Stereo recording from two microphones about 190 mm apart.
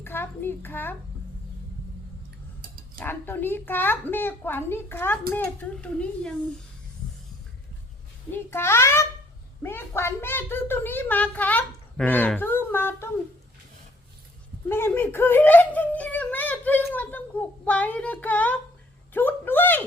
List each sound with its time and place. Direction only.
0.0 s a child's voice: 10° left (ahead or behind)
3.0 s a woman's voice: 10° left (ahead or behind)
8.3 s a woman's voice: 10° left (ahead or behind)
14.7 s a sound: 10° left (ahead or behind)
17.7 s a woman's voice: 5° left (ahead or behind)
19.1 s a sound: 10° left (ahead or behind)